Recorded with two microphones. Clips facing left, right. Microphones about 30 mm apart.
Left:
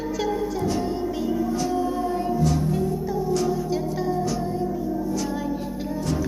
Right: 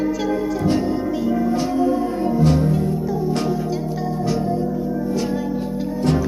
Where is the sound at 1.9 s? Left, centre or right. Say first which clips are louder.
Right 5 dB; centre.